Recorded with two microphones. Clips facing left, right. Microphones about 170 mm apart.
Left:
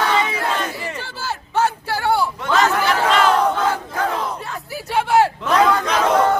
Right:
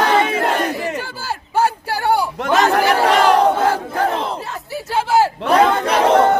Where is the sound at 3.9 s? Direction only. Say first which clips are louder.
Right 3 dB; 30° right (ahead or behind).